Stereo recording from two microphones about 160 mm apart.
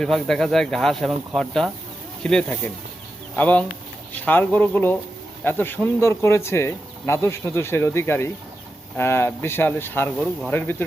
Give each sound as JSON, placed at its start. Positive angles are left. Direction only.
{"t": 0.0, "sound": "speech", "side_deg": 0}